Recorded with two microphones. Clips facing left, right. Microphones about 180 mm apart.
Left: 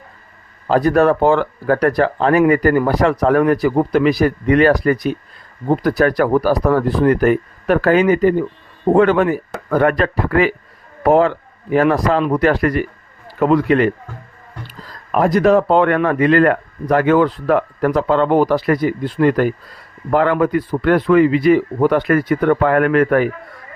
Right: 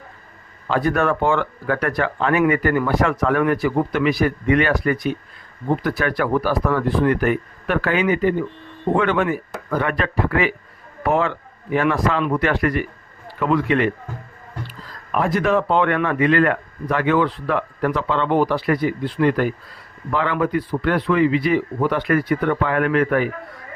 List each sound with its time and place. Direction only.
0.7 s speech: 40° left (ahead or behind)
9.6 s speech: 55° left (ahead or behind)
9.9 s a man's voice: 40° left (ahead or behind)